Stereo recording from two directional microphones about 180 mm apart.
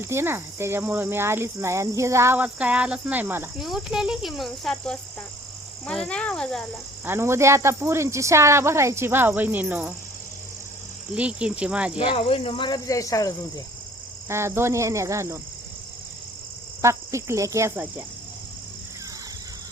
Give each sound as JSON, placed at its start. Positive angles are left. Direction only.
{"t": 0.0, "sound": "speech", "side_deg": -15}
{"t": 7.0, "sound": "speech", "side_deg": -15}
{"t": 11.1, "sound": "speech", "side_deg": -5}
{"t": 11.9, "sound": "speech", "side_deg": 30}
{"t": 14.3, "sound": "speech", "side_deg": -15}
{"t": 16.8, "sound": "speech", "side_deg": -15}